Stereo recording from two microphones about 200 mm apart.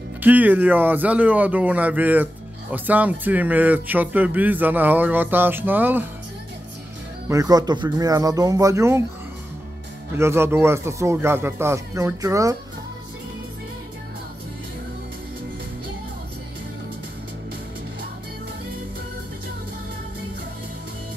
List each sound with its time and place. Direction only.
0.2 s speech: 10° right (ahead or behind)
7.2 s speech: 20° right (ahead or behind)
10.1 s speech: 15° right (ahead or behind)